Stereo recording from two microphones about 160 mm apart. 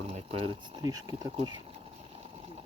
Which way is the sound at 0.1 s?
40° right (ahead or behind).